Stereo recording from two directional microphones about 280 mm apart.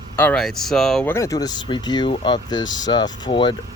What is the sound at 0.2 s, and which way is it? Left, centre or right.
Speech, centre.